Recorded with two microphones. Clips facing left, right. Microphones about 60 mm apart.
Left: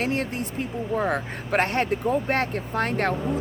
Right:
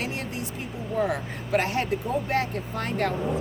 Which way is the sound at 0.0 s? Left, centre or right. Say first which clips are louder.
Left 6 dB; left.